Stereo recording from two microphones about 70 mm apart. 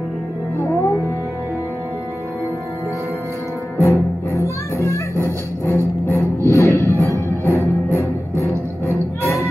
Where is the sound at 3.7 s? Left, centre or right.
Left.